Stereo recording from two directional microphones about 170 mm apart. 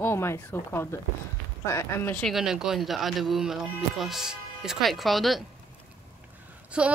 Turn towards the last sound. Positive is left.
turn(degrees=-5)  # may be behind; listen again after turning